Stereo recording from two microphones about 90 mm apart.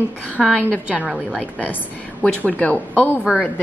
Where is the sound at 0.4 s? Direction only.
Centre (ahead or behind).